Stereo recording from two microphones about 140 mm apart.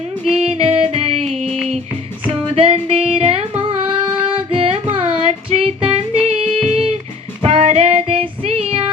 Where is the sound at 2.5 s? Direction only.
45° right (ahead or behind).